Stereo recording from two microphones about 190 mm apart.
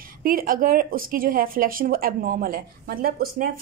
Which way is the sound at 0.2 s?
50° right (ahead or behind).